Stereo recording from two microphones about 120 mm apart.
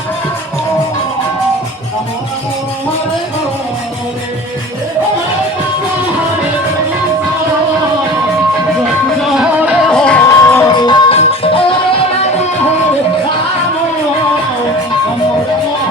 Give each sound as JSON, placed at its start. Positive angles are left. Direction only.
{"t": 9.3, "sound": "music", "side_deg": -10}
{"t": 9.8, "sound": "music", "side_deg": 5}
{"t": 10.2, "sound": "music", "side_deg": 20}
{"t": 10.7, "sound": "music", "side_deg": 35}
{"t": 11.1, "sound": "music", "side_deg": 55}